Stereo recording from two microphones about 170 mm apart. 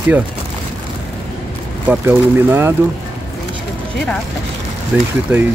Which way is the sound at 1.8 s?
10° right (ahead or behind).